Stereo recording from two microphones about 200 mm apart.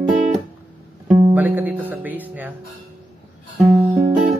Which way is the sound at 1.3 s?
10° right (ahead or behind).